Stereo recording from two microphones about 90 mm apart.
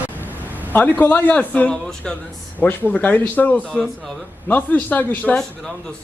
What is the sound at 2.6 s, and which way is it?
A man's voice, 20° left (ahead or behind).